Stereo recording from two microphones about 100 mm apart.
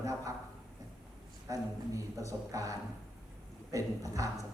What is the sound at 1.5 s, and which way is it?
Speech, 35° right (ahead or behind).